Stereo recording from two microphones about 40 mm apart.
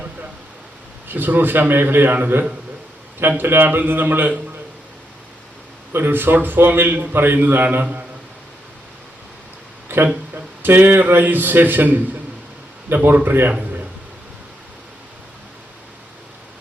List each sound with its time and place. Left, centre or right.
1.0 s a man's voice: right
5.9 s a man's voice: right
7.1 s a man's voice: right
7.3 s a man's voice: right
9.9 s a man's voice: right
12.9 s a man's voice: right
13.6 s a sound: right